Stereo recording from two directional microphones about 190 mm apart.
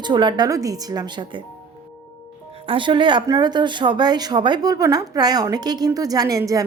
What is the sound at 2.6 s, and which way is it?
Speech, 25° right (ahead or behind).